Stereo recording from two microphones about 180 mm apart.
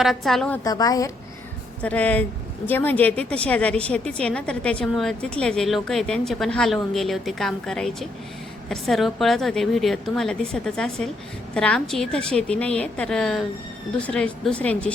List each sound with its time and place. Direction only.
0.0 s a woman's voice: centre (ahead or behind)
0.6 s a woman's voice: 20° left (ahead or behind)
1.8 s a woman's voice: 5° left (ahead or behind)